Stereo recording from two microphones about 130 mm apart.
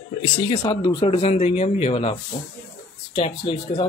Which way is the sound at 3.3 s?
35° left (ahead or behind).